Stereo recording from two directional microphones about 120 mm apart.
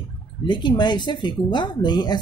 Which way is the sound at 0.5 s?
40° left (ahead or behind).